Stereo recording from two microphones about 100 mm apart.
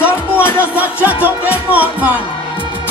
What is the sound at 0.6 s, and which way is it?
Music, 15° right (ahead or behind).